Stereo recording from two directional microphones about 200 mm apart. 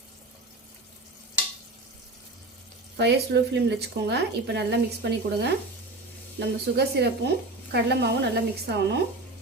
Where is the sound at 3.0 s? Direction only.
55° right (ahead or behind).